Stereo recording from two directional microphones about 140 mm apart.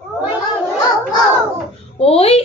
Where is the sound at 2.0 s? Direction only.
45° left (ahead or behind).